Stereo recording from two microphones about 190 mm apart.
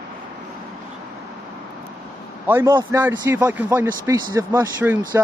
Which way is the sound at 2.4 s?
15° right (ahead or behind).